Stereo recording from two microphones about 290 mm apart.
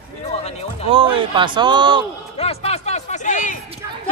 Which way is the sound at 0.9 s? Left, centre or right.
Centre.